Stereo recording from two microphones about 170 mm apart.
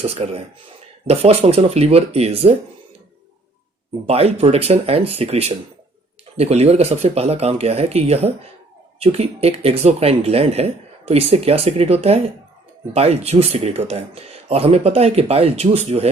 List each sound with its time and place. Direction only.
0.0 s speech: 40° right (ahead or behind)
4.0 s speech: 35° right (ahead or behind)